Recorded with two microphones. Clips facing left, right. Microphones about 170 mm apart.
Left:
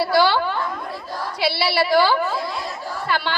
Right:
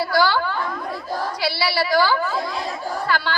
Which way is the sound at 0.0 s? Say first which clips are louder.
Left 2 dB; 25° left (ahead or behind).